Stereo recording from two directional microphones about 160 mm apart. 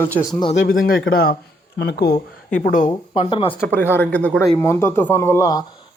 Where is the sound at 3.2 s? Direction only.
35° left (ahead or behind).